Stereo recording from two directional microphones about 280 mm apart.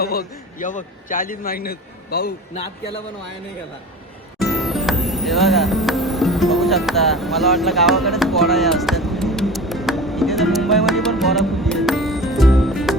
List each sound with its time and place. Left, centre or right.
0.0 s a man's voice: left
4.4 s music: centre